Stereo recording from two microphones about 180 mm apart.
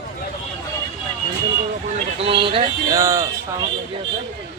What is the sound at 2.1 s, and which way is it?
Speech, 30° right (ahead or behind).